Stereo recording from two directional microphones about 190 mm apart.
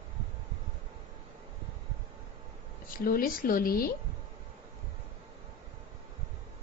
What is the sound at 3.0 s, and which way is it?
Speech, 50° left (ahead or behind).